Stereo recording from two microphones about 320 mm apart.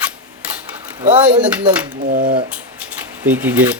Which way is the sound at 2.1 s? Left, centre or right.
Right.